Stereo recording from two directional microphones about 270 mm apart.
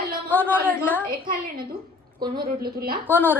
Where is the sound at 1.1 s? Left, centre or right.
Right.